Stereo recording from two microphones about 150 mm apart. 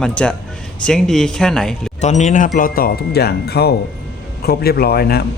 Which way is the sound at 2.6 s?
80° left.